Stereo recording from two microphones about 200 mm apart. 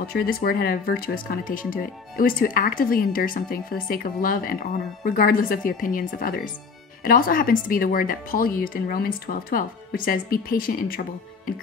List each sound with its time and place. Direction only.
0.0 s speech: 50° left (ahead or behind)